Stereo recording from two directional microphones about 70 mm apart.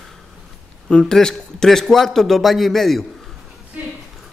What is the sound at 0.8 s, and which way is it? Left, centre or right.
A man's voice, centre.